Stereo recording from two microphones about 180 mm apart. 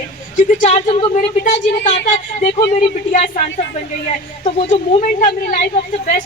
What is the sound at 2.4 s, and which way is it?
A woman's voice, 40° left (ahead or behind).